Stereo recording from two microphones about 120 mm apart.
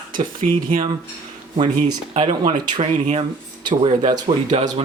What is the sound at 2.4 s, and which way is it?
Speech, 40° right (ahead or behind).